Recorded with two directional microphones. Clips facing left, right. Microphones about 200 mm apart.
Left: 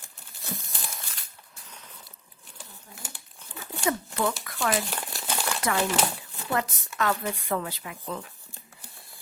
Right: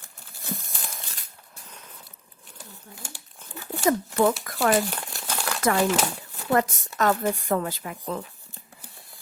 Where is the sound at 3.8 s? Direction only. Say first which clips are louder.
Right 6 dB; 40° right (ahead or behind).